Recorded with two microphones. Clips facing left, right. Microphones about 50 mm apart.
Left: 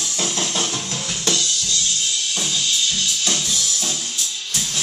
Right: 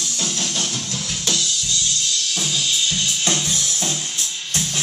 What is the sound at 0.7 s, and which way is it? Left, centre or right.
Music, centre.